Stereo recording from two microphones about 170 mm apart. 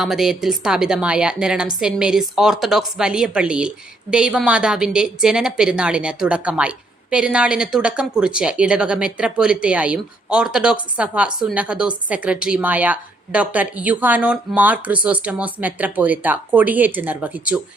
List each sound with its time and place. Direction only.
0.0 s a woman's voice: centre (ahead or behind)